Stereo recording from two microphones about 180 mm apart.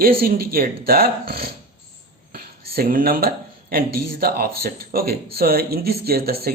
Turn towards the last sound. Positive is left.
turn(degrees=-60)  # may be behind; listen again after turning